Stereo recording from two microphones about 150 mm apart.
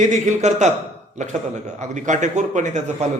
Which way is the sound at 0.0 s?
55° right (ahead or behind).